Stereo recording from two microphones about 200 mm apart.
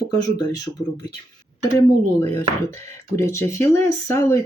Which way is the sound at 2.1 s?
10° left (ahead or behind).